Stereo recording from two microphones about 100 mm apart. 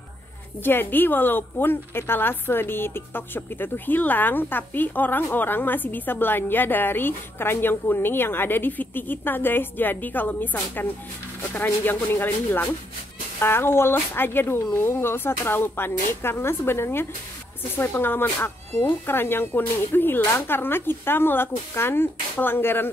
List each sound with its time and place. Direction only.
0.7 s a woman's voice: 20° left (ahead or behind)